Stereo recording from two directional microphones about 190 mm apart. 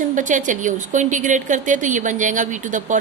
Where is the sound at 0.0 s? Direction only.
40° right (ahead or behind).